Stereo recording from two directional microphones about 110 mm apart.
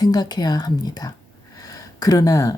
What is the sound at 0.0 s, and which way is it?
Speech, 35° left (ahead or behind).